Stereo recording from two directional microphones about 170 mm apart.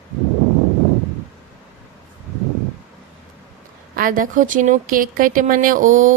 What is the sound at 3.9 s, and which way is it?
Speech, 55° right (ahead or behind).